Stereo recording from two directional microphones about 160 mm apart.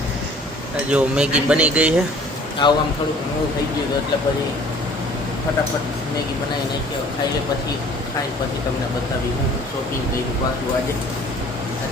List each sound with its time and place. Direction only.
0.9 s speech: 5° right (ahead or behind)
2.6 s a man's voice: 30° left (ahead or behind)